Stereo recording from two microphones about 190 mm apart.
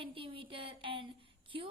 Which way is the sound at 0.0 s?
30° right (ahead or behind).